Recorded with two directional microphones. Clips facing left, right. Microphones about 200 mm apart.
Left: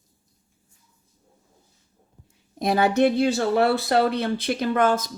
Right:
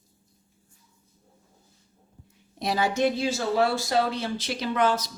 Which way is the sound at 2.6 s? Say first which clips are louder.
Left 5 dB; 55° left (ahead or behind).